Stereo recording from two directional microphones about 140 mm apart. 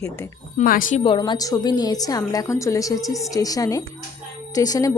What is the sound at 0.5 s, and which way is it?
Speech, 80° left.